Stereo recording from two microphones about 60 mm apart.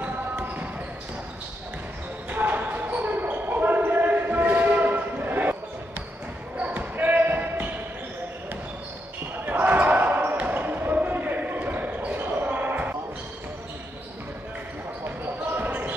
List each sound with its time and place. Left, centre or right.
0.0 s basketball bounce: right
2.2 s basketball bounce: right
9.5 s basketball bounce: right
15.0 s basketball bounce: right